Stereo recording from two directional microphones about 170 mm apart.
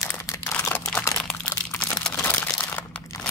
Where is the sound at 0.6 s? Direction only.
15° left (ahead or behind).